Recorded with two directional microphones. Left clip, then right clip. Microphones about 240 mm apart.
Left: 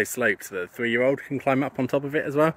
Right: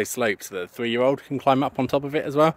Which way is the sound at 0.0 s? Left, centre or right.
Centre.